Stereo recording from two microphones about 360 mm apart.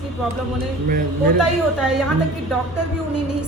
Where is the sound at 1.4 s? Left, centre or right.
Centre.